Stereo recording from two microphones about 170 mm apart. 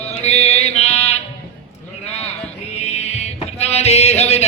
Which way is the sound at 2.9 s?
40° left (ahead or behind).